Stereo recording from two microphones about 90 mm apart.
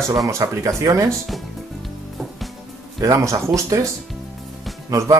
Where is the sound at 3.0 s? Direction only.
35° right (ahead or behind).